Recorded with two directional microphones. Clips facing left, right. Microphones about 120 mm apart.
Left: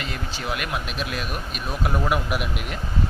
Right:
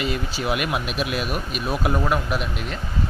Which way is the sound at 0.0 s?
10° right (ahead or behind).